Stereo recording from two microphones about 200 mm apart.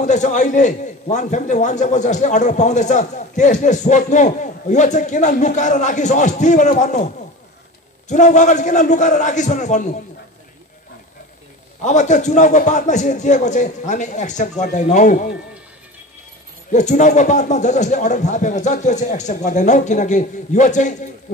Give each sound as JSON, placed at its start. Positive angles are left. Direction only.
{"t": 0.0, "sound": "a man's voice", "side_deg": 35}
{"t": 11.8, "sound": "a man's voice", "side_deg": 35}
{"t": 16.7, "sound": "a man's voice", "side_deg": 35}